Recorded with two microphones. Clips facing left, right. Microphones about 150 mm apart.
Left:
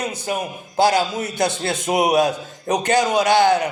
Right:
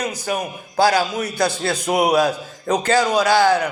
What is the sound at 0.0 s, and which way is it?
A man's voice, 25° left (ahead or behind).